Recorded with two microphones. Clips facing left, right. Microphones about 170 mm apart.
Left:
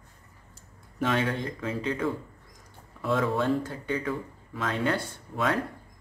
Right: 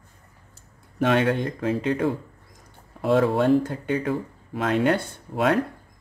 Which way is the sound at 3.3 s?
65° right (ahead or behind).